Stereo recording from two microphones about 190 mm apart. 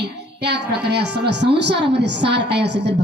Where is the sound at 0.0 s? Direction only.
60° right (ahead or behind).